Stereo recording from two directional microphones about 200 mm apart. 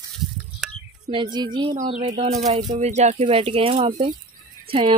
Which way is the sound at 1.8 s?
35° right (ahead or behind).